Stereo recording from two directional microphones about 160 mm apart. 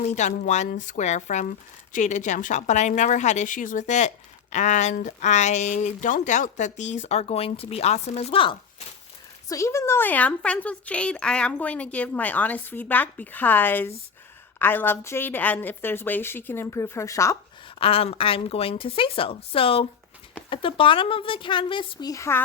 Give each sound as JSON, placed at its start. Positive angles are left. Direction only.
{"t": 0.2, "sound": "speech", "side_deg": 50}
{"t": 9.5, "sound": "a woman's voice", "side_deg": 20}
{"t": 17.7, "sound": "a woman's voice", "side_deg": 35}